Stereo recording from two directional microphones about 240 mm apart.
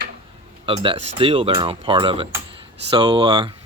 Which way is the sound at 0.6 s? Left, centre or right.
Right.